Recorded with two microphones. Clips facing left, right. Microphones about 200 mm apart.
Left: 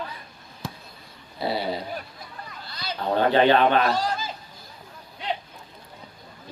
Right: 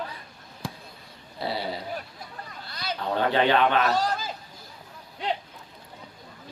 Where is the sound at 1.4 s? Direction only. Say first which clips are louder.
Left 4 dB; 15° left (ahead or behind).